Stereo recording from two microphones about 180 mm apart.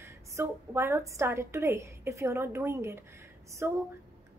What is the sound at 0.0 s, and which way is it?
A woman's voice, 15° right (ahead or behind).